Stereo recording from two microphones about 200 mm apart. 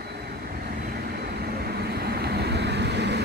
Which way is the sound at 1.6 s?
55° right (ahead or behind).